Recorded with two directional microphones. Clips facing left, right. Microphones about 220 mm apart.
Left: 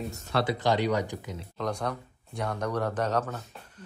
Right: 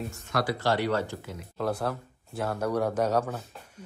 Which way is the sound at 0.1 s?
40° left (ahead or behind).